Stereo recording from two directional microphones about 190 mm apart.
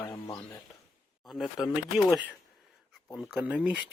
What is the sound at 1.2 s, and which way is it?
Speech, centre (ahead or behind).